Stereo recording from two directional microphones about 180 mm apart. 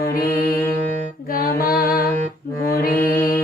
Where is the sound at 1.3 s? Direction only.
55° left (ahead or behind).